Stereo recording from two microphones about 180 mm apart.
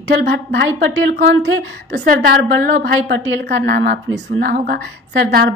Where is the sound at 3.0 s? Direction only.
70° right (ahead or behind).